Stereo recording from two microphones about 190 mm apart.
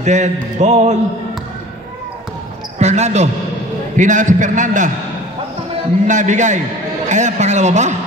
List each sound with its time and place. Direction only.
0.0 s a man's voice: 40° right (ahead or behind)
2.8 s a man's voice: 35° right (ahead or behind)
6.0 s a man's voice: 40° right (ahead or behind)